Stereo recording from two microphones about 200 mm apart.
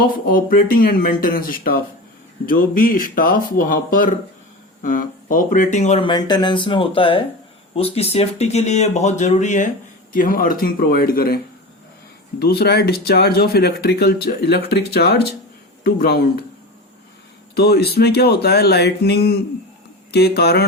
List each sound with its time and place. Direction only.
0.0 s speech: 45° left (ahead or behind)
12.4 s speech: 50° left (ahead or behind)
17.5 s speech: 50° left (ahead or behind)